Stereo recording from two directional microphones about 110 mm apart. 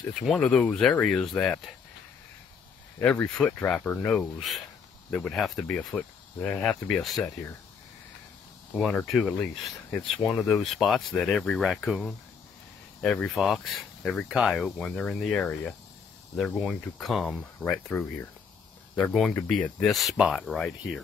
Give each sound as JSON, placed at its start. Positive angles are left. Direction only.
{"t": 0.3, "sound": "speech", "side_deg": 5}
{"t": 3.0, "sound": "speech", "side_deg": 10}
{"t": 8.7, "sound": "speech", "side_deg": 0}
{"t": 17.3, "sound": "speech", "side_deg": 10}